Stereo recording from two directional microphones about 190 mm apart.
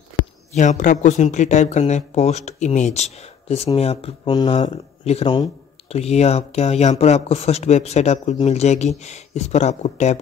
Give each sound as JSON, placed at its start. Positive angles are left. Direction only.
{"t": 0.5, "sound": "speech", "side_deg": 40}